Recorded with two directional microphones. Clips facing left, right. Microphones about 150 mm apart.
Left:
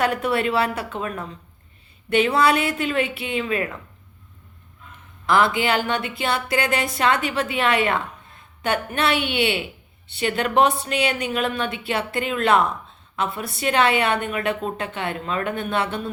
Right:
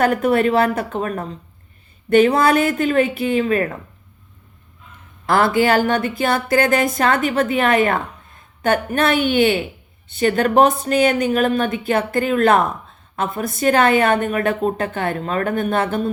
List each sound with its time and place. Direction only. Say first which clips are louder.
0.0 s a woman's voice: right 6 dB; 45° right (ahead or behind)
5.3 s a woman's voice: right 4 dB; 45° right (ahead or behind)